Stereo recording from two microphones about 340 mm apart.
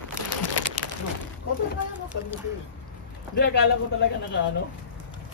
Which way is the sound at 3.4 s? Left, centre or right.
Left.